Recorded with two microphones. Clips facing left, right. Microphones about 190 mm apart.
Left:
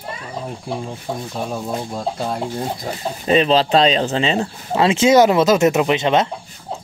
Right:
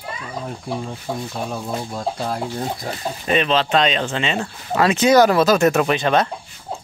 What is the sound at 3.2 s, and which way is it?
Speech, 30° left (ahead or behind).